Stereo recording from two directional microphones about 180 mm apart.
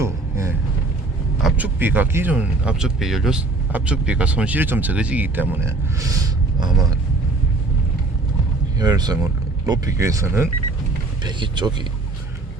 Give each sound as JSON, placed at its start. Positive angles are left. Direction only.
{"t": 0.0, "sound": "a sound", "side_deg": -15}
{"t": 1.4, "sound": "speech", "side_deg": -5}
{"t": 8.8, "sound": "speech", "side_deg": -20}
{"t": 11.2, "sound": "speech", "side_deg": -25}